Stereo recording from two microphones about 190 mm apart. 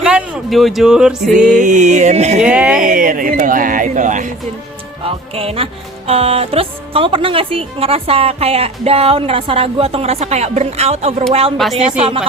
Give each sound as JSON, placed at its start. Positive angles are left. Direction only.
{"t": 0.0, "sound": "speech", "side_deg": -5}
{"t": 1.5, "sound": "speech", "side_deg": -40}
{"t": 2.4, "sound": "speech", "side_deg": -5}
{"t": 2.8, "sound": "speech", "side_deg": -45}
{"t": 5.0, "sound": "speech", "side_deg": -30}
{"t": 11.5, "sound": "speech", "side_deg": 0}
{"t": 11.8, "sound": "speech", "side_deg": -30}